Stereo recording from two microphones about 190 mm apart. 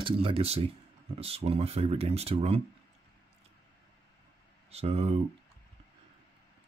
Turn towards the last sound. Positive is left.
turn(degrees=-30)  # may be behind; listen again after turning